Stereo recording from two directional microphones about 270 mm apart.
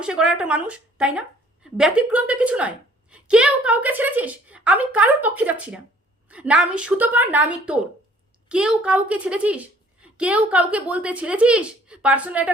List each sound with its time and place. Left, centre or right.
0.0 s a woman's voice: centre